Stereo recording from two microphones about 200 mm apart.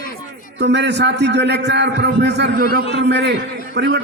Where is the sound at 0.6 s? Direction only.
60° right (ahead or behind).